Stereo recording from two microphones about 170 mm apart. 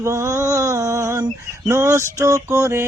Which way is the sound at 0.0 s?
15° right (ahead or behind).